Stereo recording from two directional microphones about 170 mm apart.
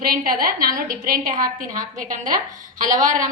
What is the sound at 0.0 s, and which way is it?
A woman's voice, 60° right (ahead or behind).